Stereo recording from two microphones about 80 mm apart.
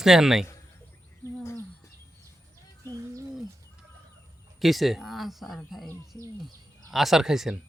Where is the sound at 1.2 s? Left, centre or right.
Left.